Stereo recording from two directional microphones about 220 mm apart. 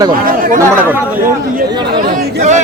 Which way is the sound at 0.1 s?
40° right (ahead or behind).